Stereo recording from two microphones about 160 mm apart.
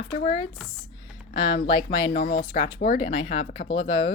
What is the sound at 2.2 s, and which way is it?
Speech, 75° left (ahead or behind).